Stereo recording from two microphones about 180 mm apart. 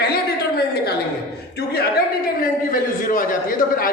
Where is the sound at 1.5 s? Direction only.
60° left (ahead or behind).